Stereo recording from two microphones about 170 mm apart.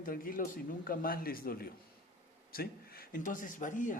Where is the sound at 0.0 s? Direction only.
55° left (ahead or behind).